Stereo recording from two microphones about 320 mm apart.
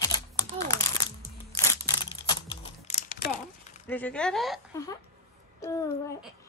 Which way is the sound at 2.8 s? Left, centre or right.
Left.